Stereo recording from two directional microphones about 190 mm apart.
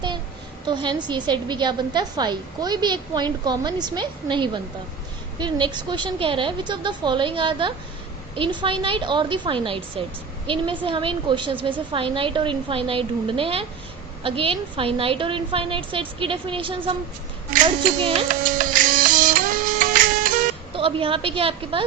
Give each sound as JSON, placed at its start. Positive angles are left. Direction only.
{"t": 0.7, "sound": "a woman's voice", "side_deg": -25}
{"t": 18.3, "sound": "music", "side_deg": -45}
{"t": 20.7, "sound": "a woman's voice", "side_deg": -30}